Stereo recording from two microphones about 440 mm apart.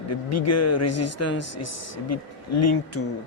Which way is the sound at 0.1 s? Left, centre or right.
Left.